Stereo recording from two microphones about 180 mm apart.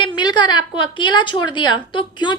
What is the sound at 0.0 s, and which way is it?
A woman's voice, 25° left (ahead or behind).